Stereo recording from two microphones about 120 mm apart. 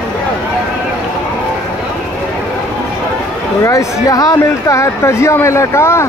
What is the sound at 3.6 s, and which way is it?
Speech, 25° left (ahead or behind).